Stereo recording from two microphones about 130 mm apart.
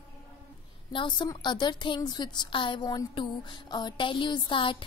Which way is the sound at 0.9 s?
40° left (ahead or behind).